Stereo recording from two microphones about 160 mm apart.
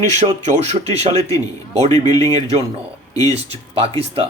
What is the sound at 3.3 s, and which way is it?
Speech, 40° right (ahead or behind).